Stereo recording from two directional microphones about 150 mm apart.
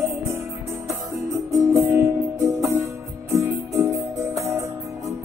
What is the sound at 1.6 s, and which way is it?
Music, 15° right (ahead or behind).